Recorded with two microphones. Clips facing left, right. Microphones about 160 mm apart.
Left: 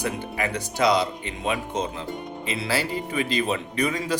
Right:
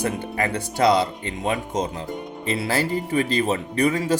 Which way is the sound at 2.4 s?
40° right (ahead or behind).